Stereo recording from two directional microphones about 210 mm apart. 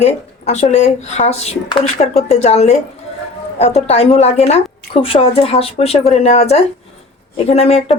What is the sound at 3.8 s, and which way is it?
Speech, 30° left (ahead or behind).